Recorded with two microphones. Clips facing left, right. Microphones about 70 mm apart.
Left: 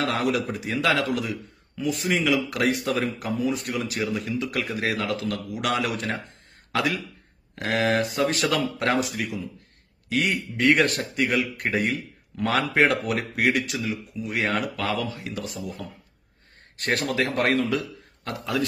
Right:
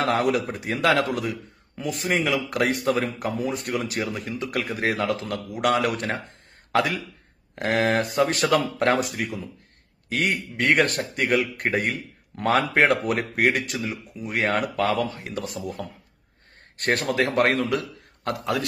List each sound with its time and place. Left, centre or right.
0.0 s a man's voice: right